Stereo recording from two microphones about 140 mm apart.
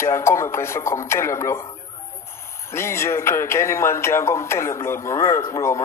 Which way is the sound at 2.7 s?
20° left (ahead or behind).